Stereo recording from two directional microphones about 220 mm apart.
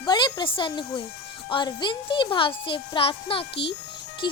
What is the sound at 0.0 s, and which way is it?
A child's voice, 20° left (ahead or behind).